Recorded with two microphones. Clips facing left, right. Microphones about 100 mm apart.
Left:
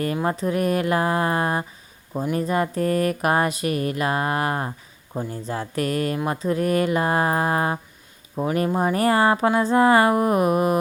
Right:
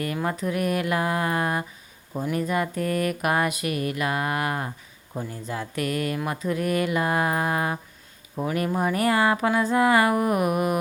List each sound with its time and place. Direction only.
0.0 s speech: 30° left (ahead or behind)